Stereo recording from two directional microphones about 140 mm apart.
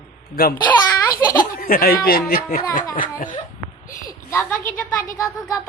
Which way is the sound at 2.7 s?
70° left (ahead or behind).